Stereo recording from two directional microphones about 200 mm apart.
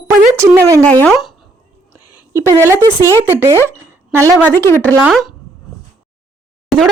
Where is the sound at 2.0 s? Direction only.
20° left (ahead or behind).